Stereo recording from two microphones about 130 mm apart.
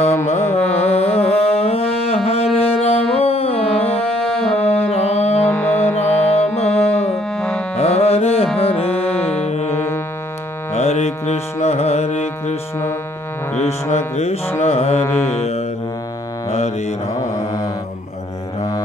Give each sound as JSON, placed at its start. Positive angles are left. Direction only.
{"t": 0.3, "sound": "music", "side_deg": 55}
{"t": 5.4, "sound": "music", "side_deg": 15}
{"t": 6.3, "sound": "music", "side_deg": 55}
{"t": 7.3, "sound": "music", "side_deg": 5}
{"t": 7.7, "sound": "music", "side_deg": 55}
{"t": 10.7, "sound": "carnatic music", "side_deg": 55}
{"t": 13.6, "sound": "music", "side_deg": 60}
{"t": 15.0, "sound": "mantra", "side_deg": 20}
{"t": 15.3, "sound": "music", "side_deg": 55}
{"t": 16.5, "sound": "mantra", "side_deg": 55}
{"t": 17.1, "sound": "mantra", "side_deg": 25}